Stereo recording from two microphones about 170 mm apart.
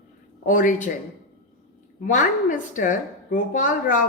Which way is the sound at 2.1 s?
50° left (ahead or behind).